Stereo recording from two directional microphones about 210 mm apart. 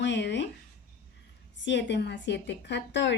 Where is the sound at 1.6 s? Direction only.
55° left (ahead or behind).